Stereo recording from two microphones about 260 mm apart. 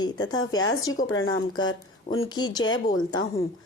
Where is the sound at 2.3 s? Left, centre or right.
Centre.